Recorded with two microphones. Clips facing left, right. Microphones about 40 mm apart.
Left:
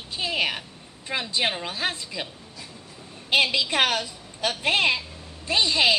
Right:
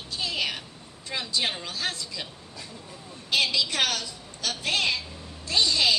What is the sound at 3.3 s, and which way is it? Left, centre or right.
A woman's voice, left.